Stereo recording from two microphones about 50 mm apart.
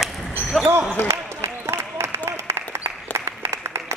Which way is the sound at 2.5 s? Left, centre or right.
Right.